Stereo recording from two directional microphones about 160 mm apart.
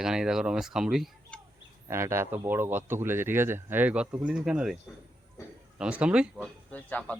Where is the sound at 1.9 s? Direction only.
15° right (ahead or behind).